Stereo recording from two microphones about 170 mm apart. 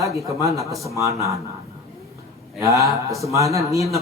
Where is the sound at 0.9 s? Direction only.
15° right (ahead or behind).